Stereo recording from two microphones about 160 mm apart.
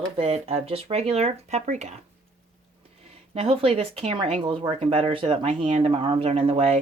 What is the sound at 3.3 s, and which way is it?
Speech, 35° right (ahead or behind).